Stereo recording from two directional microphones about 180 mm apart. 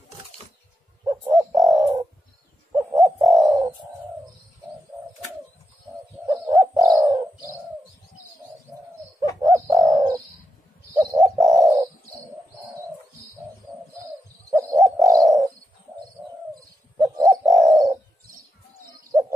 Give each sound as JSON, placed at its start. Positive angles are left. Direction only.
{"t": 1.0, "sound": "bird", "side_deg": -20}
{"t": 6.2, "sound": "bird", "side_deg": -20}
{"t": 9.4, "sound": "bird", "side_deg": -20}
{"t": 11.3, "sound": "bird", "side_deg": -20}
{"t": 14.5, "sound": "bird", "side_deg": -15}
{"t": 17.0, "sound": "bird", "side_deg": -15}